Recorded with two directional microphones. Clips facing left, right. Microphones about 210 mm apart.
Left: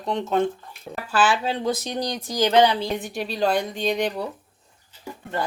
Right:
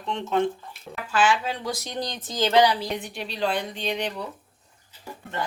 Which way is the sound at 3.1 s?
40° left (ahead or behind).